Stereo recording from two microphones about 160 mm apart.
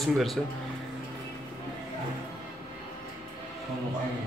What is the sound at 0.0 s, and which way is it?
Speech, centre (ahead or behind).